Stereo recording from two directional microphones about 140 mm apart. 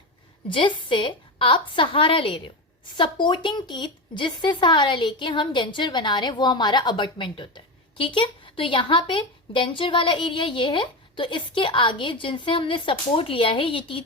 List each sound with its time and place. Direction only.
0.4 s speech: 35° left (ahead or behind)